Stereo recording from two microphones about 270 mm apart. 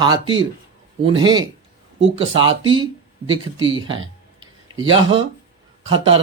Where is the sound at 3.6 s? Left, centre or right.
Centre.